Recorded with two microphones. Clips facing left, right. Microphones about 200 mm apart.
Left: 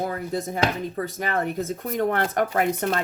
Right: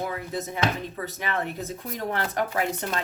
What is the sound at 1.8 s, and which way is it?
Speech, 55° left (ahead or behind).